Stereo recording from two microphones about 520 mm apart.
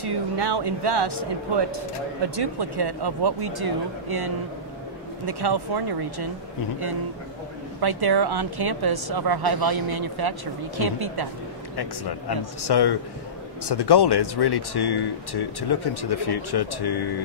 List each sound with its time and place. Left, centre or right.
0.0 s speech: right
7.8 s speech: right
11.7 s speech: left